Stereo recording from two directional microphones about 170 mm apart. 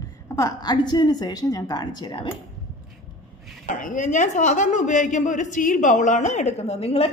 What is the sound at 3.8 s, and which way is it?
A woman's voice, 50° left (ahead or behind).